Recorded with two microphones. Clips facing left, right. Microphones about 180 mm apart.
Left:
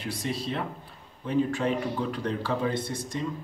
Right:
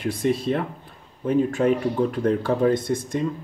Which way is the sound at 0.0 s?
50° right (ahead or behind).